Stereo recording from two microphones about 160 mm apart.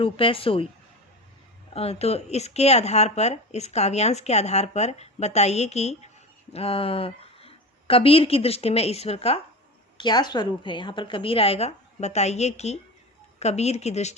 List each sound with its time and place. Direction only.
0.0 s a woman's voice: 35° left (ahead or behind)
1.7 s speech: 40° left (ahead or behind)
10.0 s a woman's voice: 25° left (ahead or behind); by 14.2 s 45° left (ahead or behind)